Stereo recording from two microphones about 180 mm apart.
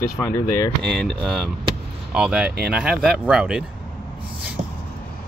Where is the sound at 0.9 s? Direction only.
Centre (ahead or behind).